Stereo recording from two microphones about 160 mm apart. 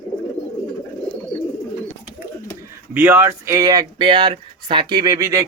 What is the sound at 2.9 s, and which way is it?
Speech, 15° right (ahead or behind).